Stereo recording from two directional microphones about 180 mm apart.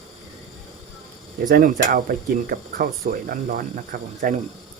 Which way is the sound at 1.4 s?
50° right (ahead or behind).